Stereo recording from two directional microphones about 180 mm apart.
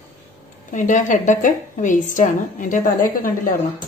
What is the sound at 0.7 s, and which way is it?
A woman's voice, 45° left (ahead or behind).